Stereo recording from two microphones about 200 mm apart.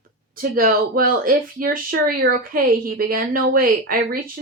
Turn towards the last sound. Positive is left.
turn(degrees=-45)  # may be behind; listen again after turning